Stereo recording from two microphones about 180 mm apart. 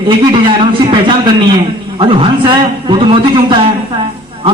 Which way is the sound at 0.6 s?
30° right (ahead or behind).